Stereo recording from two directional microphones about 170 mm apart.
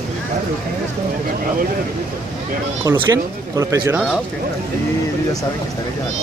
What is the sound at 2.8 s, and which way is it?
Speech, 20° right (ahead or behind).